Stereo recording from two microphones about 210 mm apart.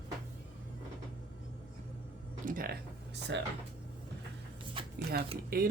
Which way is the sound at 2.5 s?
45° right (ahead or behind).